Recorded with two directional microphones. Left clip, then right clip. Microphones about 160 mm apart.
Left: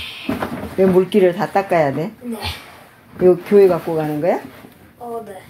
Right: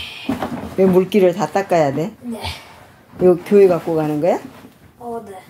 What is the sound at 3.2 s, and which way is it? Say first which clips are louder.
Speech: even; 20° right (ahead or behind).